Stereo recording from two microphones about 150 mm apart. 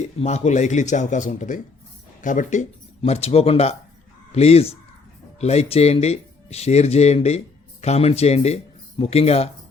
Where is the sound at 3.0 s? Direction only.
45° left (ahead or behind).